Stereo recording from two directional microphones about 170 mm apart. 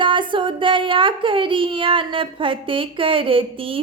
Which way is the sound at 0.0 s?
30° right (ahead or behind).